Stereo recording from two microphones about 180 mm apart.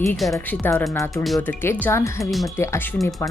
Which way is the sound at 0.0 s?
Centre (ahead or behind).